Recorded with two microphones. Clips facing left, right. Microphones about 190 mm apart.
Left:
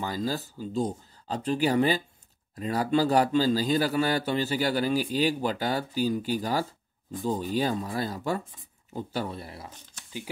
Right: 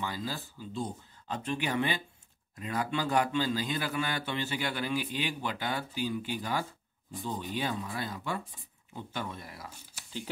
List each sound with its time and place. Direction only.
0.0 s a man's voice: 40° left (ahead or behind)
9.7 s speech: 10° right (ahead or behind)